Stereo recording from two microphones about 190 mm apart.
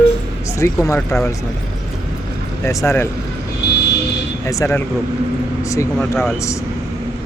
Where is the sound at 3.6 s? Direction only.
65° left (ahead or behind).